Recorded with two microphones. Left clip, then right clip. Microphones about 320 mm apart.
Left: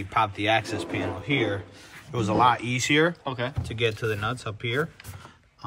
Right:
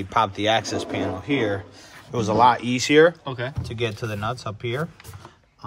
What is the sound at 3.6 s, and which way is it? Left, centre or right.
Speech, centre.